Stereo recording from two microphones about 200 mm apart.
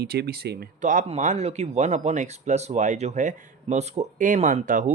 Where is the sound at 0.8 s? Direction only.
40° right (ahead or behind).